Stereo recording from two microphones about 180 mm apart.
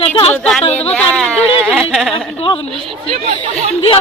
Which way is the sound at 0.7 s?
5° left (ahead or behind).